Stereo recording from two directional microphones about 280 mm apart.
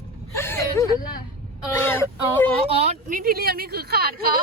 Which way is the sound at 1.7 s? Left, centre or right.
Centre.